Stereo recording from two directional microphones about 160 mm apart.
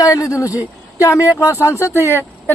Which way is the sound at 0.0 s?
20° left (ahead or behind).